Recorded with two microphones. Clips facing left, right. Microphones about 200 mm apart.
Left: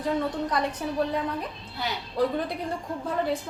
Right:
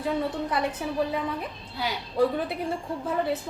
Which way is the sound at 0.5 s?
5° right (ahead or behind).